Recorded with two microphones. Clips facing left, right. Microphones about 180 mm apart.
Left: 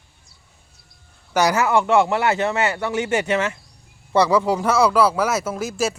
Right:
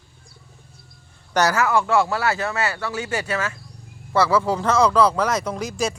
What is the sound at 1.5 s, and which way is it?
Speech, 25° left (ahead or behind).